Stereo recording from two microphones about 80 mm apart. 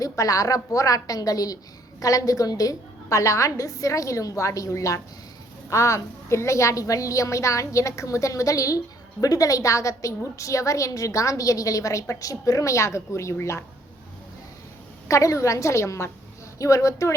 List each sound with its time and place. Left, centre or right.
0.0 s a woman's voice: left
15.0 s a woman's voice: left